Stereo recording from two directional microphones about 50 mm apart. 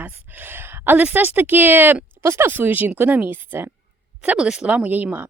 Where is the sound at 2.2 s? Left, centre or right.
Right.